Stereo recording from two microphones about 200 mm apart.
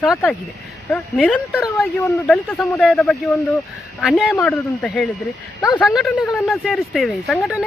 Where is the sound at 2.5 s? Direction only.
15° left (ahead or behind).